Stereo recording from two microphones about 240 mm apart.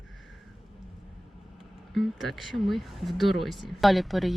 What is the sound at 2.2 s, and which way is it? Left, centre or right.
Speech, centre.